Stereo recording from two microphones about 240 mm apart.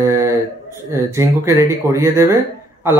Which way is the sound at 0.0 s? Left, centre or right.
Centre.